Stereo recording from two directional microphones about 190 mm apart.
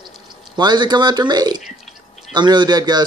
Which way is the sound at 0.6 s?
20° right (ahead or behind).